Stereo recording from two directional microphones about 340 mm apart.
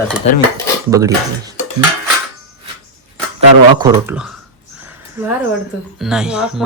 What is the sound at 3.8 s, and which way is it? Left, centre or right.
Speech, centre.